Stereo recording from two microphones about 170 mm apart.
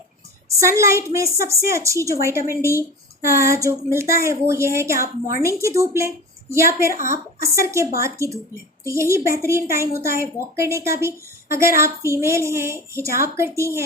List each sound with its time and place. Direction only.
0.6 s a woman's voice: 15° right (ahead or behind)